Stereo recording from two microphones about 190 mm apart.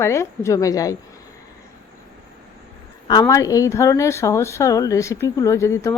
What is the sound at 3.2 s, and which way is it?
Speech, 15° left (ahead or behind).